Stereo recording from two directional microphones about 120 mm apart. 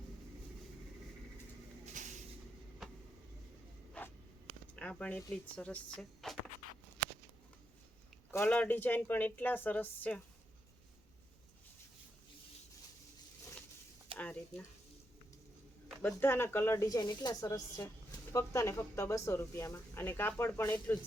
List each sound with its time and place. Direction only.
1.8 s vehicle: 90° right
4.0 s a sound: 10° left (ahead or behind)
4.7 s speech: 10° left (ahead or behind)
8.3 s speech: 15° left (ahead or behind)
14.2 s a sound: 10° left (ahead or behind)
16.0 s speech: 15° left (ahead or behind)